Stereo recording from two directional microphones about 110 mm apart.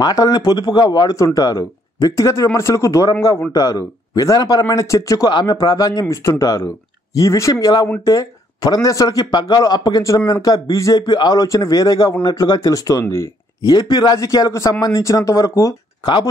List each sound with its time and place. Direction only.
0.0 s speech: 35° left (ahead or behind)